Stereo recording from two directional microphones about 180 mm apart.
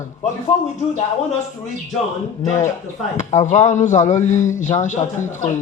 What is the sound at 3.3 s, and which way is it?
Speech, 40° left (ahead or behind).